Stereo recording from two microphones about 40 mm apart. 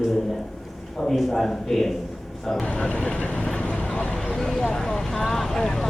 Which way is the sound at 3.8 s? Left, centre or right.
Left.